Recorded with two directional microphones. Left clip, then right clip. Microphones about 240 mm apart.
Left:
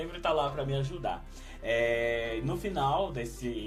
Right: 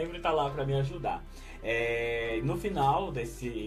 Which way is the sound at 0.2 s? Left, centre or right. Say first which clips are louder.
Left 1 dB; left.